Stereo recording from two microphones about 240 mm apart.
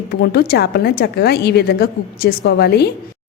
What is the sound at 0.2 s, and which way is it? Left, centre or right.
A woman's voice, left.